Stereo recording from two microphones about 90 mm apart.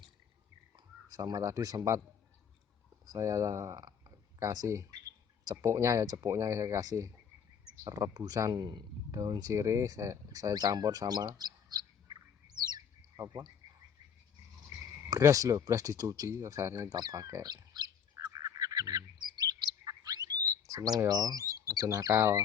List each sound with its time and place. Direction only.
1.0 s speech: 45° right (ahead or behind)
3.1 s speech: 40° right (ahead or behind)
15.1 s speech: 40° right (ahead or behind)
17.0 s speech: 45° right (ahead or behind)
18.4 s bird: 40° right (ahead or behind)
21.1 s speech: 45° right (ahead or behind)